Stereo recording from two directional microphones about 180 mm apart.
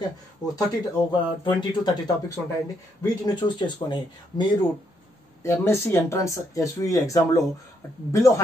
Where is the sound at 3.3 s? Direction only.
25° left (ahead or behind).